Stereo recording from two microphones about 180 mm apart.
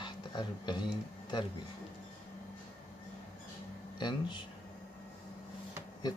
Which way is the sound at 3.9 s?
25° left (ahead or behind).